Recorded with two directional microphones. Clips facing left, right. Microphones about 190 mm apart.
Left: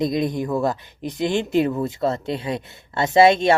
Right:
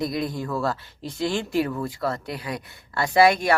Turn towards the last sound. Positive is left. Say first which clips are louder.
# left 4 dB
turn(degrees=25)  # may be behind; listen again after turning